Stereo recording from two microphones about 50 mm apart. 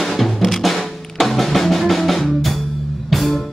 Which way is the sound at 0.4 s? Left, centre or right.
Centre.